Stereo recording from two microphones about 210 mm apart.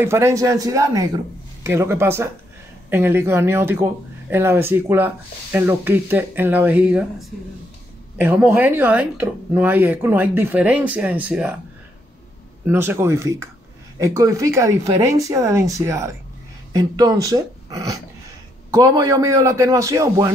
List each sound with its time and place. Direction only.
0.0 s speech: 15° right (ahead or behind)
12.6 s speech: 10° right (ahead or behind)